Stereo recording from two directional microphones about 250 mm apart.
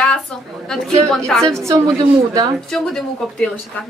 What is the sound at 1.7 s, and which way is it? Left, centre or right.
Speech, centre.